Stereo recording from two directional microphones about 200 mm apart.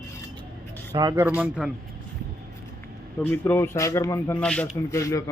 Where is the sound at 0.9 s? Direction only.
20° right (ahead or behind).